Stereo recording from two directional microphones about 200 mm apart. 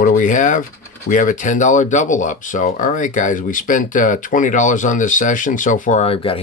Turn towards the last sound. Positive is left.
turn(degrees=30)  # may be behind; listen again after turning